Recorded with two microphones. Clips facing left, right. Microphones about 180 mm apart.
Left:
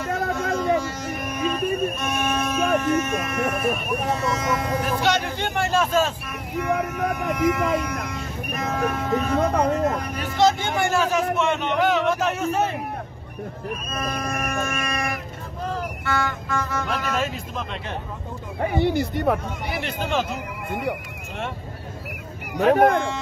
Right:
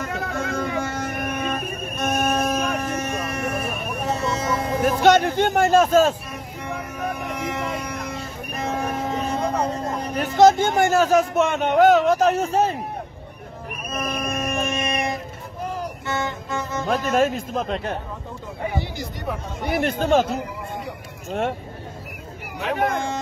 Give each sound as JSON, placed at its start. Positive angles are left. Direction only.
{"t": 0.1, "sound": "music", "side_deg": -55}
{"t": 4.1, "sound": "vehicle", "side_deg": -30}
{"t": 4.8, "sound": "music", "side_deg": -50}
{"t": 7.2, "sound": "vehicle", "side_deg": -25}
{"t": 10.1, "sound": "speech", "side_deg": -45}
{"t": 13.8, "sound": "music", "side_deg": -15}
{"t": 16.9, "sound": "speech", "side_deg": -45}
{"t": 18.8, "sound": "speech", "side_deg": 60}
{"t": 19.6, "sound": "speech", "side_deg": -50}
{"t": 21.3, "sound": "speech", "side_deg": -50}
{"t": 22.6, "sound": "speech", "side_deg": 45}